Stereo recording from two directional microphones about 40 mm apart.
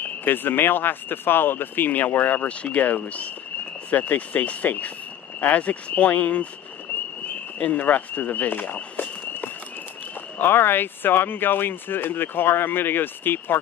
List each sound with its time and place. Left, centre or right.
0.0 s speech: left
2.4 s speech: left
7.5 s speech: left
7.8 s speech: left
10.4 s speech: left